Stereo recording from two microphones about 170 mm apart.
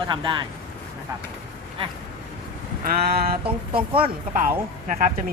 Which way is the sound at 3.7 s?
30° right (ahead or behind).